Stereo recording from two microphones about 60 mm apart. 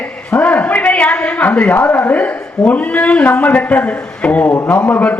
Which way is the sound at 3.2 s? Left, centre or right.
Left.